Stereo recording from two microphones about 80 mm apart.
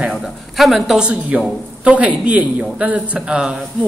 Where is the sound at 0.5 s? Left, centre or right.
Centre.